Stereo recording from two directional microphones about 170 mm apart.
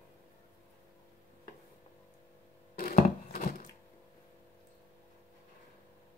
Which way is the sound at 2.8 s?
55° left (ahead or behind).